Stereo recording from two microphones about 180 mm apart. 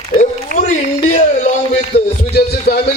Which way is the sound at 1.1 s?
45° left (ahead or behind).